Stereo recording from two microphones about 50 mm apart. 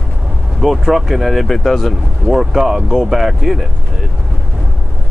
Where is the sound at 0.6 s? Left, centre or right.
Centre.